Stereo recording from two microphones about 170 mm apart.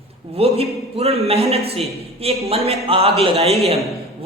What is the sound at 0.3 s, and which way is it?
A man's voice, 35° right (ahead or behind).